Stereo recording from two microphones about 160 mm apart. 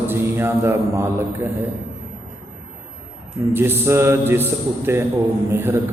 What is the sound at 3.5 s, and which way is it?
A man's voice, 15° right (ahead or behind).